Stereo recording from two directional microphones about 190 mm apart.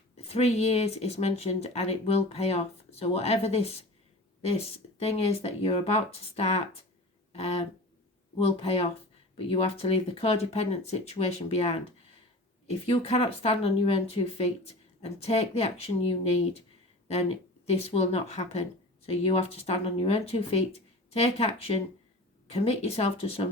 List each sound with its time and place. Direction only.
0.2 s speech: 35° left (ahead or behind)
8.4 s speech: 30° left (ahead or behind)